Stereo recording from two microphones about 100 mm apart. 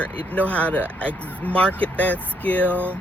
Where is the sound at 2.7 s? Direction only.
20° right (ahead or behind).